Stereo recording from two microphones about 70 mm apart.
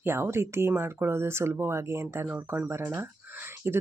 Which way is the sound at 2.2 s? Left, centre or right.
Right.